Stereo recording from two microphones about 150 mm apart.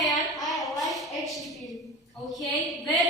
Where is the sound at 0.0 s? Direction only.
Centre (ahead or behind).